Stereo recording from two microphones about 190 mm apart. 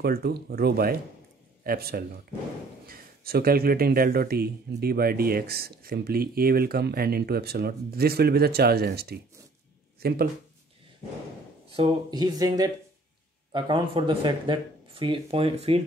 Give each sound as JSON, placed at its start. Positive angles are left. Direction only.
{"t": 0.0, "sound": "a man's voice", "side_deg": -55}
{"t": 11.7, "sound": "speech", "side_deg": -25}